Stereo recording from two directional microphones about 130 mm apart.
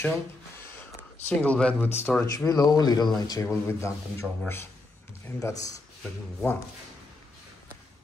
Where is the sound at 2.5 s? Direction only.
30° left (ahead or behind).